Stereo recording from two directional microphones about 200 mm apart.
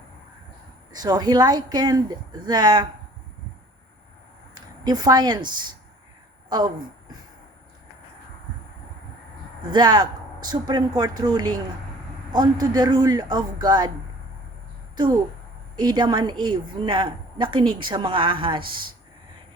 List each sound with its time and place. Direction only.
0.9 s a woman's voice: 20° right (ahead or behind)
4.5 s a woman's voice: 20° right (ahead or behind)
9.6 s a woman's voice: 20° right (ahead or behind)
15.7 s a woman's voice: 20° right (ahead or behind)